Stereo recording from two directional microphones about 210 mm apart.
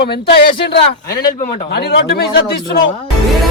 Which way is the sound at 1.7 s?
50° left (ahead or behind).